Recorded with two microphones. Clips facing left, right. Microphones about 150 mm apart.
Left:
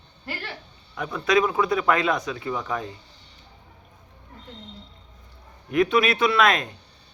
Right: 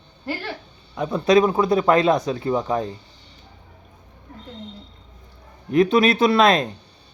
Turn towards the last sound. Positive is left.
turn(degrees=-30)  # may be behind; listen again after turning